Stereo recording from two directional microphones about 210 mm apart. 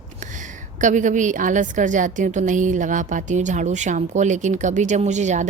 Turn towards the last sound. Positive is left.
turn(degrees=-35)  # may be behind; listen again after turning